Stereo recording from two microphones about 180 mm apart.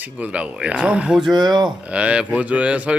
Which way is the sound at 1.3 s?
25° right (ahead or behind).